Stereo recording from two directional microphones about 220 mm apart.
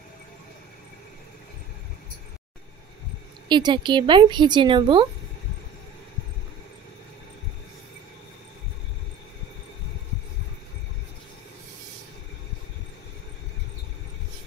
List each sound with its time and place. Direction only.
3.4 s speech: 20° right (ahead or behind)